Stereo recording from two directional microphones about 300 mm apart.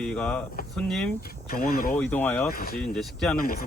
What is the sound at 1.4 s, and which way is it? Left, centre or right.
Speech, left.